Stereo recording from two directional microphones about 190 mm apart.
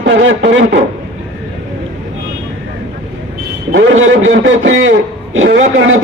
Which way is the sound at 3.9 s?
90° right.